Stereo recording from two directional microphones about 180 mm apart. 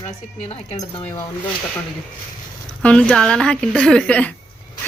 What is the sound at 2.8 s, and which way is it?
A woman's voice, 5° left (ahead or behind).